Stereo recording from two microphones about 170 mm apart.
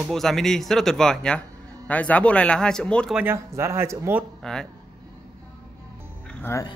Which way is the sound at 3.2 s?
15° right (ahead or behind).